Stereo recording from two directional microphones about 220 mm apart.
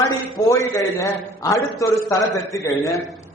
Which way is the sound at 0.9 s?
15° left (ahead or behind).